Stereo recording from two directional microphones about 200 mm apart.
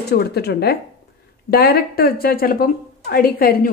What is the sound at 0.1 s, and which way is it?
A woman's voice, 55° left (ahead or behind).